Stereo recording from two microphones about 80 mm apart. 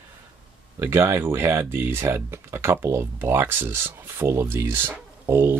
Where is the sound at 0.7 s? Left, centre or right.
Right.